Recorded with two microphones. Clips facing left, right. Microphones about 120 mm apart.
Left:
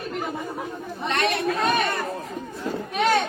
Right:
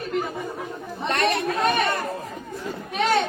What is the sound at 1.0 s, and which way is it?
Chatter, 45° right (ahead or behind).